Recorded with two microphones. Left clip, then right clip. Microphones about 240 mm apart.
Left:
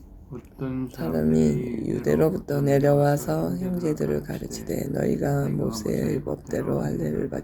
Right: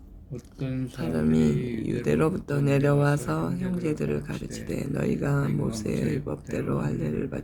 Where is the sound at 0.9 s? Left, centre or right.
Centre.